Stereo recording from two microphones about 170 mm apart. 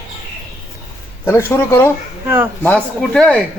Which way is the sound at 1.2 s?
15° left (ahead or behind).